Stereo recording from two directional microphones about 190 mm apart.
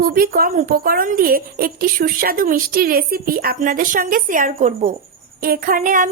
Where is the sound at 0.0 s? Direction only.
50° right (ahead or behind).